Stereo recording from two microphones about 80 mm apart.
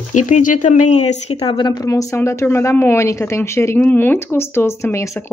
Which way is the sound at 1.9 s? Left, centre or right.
Left.